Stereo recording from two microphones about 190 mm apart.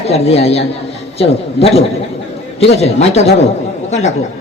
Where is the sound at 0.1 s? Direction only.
30° left (ahead or behind).